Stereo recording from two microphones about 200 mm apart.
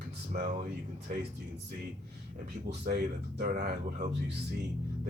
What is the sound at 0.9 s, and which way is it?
Speech, 50° right (ahead or behind).